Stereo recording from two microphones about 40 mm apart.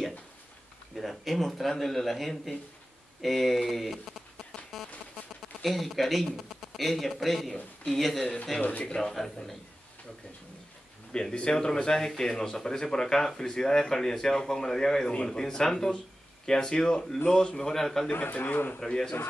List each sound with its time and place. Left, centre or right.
0.9 s speech: centre
5.6 s a man's voice: centre
8.8 s a man's voice: centre
11.3 s a man's voice: left
18.4 s a man's voice: left
18.8 s a man's voice: centre